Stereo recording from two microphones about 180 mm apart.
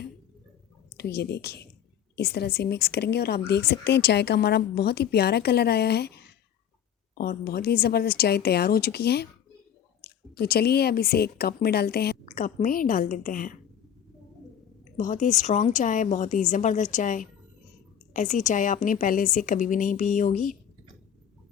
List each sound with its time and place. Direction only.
0.9 s a woman's voice: 65° left (ahead or behind)
7.2 s a woman's voice: 60° left (ahead or behind)
12.2 s a woman's voice: 45° left (ahead or behind)
14.9 s a woman's voice: 45° left (ahead or behind)